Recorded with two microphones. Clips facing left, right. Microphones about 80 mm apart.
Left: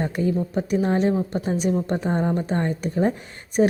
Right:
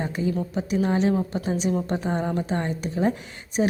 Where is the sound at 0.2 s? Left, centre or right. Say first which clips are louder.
Left 3 dB; left.